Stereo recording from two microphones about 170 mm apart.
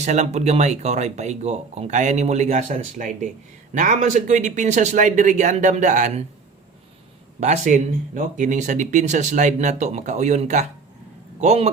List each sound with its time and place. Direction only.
0.0 s speech: 45° right (ahead or behind)
7.3 s a man's voice: 45° right (ahead or behind)